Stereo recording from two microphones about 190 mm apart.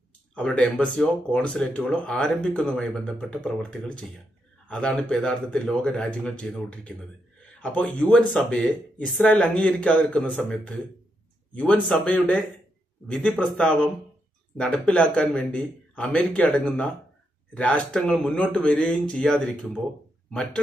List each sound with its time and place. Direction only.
0.3 s a man's voice: 5° left (ahead or behind)